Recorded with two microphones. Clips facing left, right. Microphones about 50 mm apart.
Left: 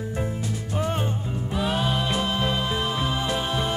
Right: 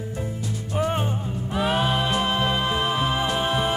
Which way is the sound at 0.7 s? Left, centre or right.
Centre.